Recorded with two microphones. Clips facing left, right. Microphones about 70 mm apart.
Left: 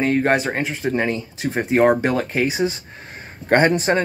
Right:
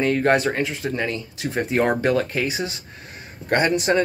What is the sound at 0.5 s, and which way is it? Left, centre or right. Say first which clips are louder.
Speech: left 1 dB; left.